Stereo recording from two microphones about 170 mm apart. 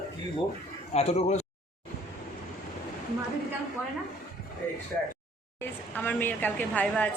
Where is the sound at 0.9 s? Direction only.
40° left (ahead or behind).